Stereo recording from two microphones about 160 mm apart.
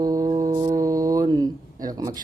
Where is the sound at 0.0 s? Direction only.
20° right (ahead or behind).